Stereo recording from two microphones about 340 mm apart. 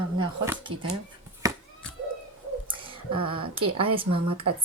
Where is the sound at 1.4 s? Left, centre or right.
Centre.